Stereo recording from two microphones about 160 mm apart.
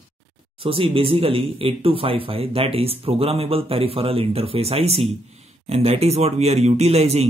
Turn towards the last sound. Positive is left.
turn(degrees=-40)  # may be behind; listen again after turning